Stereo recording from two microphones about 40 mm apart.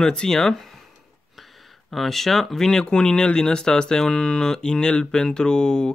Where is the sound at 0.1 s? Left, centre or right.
Centre.